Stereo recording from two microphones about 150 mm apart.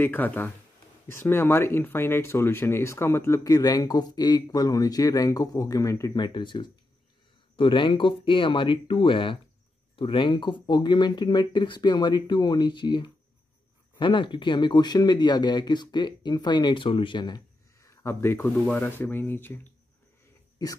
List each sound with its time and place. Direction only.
0.0 s speech: 10° left (ahead or behind)